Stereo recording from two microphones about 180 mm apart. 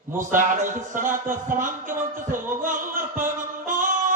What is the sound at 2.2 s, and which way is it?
Music, 50° right (ahead or behind).